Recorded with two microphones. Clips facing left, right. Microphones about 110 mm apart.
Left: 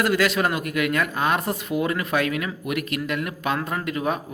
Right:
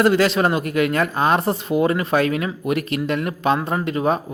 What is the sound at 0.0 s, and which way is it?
Speech, 30° right (ahead or behind).